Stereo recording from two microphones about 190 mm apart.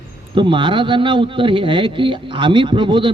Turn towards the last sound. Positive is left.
turn(degrees=-25)  # may be behind; listen again after turning